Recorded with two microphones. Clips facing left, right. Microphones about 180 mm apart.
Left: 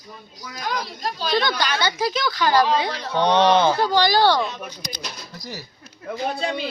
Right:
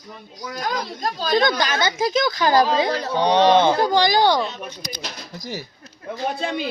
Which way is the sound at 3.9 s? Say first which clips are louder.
Right 1 dB; 20° right (ahead or behind).